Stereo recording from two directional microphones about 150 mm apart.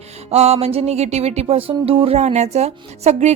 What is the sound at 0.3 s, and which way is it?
A woman's voice, 45° right (ahead or behind).